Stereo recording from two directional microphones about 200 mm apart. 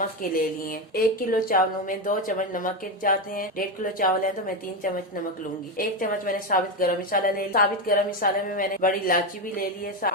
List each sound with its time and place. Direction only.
0.2 s speech: 45° left (ahead or behind)